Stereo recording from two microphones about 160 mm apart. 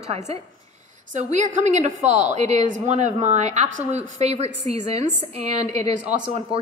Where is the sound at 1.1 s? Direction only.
50° right (ahead or behind).